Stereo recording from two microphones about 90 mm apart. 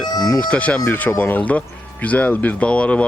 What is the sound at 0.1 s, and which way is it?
Speech, 45° left (ahead or behind).